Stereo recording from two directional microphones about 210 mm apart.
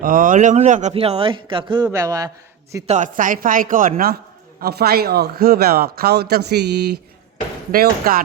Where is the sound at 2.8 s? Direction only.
35° right (ahead or behind).